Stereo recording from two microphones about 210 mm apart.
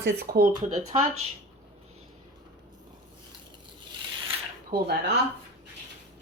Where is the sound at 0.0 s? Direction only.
45° right (ahead or behind).